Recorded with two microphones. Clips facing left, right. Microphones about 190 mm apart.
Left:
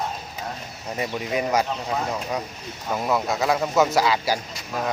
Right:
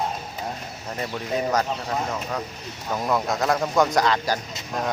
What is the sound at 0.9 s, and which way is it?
Speech, 10° left (ahead or behind).